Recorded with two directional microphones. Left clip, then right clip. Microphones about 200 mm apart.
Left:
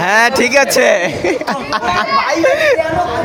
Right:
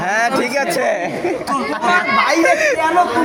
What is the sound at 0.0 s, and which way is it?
Speech, 35° left (ahead or behind).